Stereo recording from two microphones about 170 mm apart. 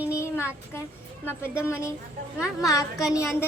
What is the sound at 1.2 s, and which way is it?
Speech, 10° left (ahead or behind).